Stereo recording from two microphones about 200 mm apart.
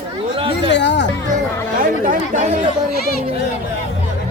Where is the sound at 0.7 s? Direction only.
60° left (ahead or behind).